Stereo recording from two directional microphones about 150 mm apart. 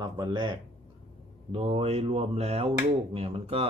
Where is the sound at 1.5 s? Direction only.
40° right (ahead or behind).